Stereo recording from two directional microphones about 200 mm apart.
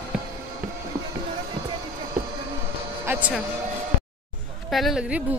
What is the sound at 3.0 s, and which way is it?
Speech, 10° right (ahead or behind).